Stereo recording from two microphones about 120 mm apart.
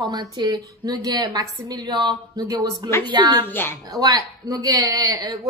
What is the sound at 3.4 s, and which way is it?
Speech, 15° left (ahead or behind).